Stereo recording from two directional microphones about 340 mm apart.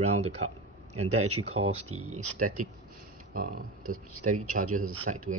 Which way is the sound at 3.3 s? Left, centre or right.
Right.